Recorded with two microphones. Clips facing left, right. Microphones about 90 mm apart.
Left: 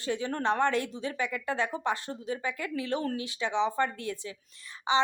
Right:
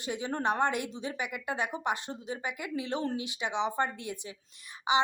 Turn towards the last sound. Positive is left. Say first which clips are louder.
# left 1 dB
turn(degrees=-15)  # may be behind; listen again after turning